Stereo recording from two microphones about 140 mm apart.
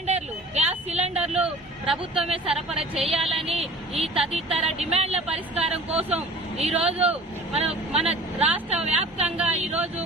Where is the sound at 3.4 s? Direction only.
45° right (ahead or behind).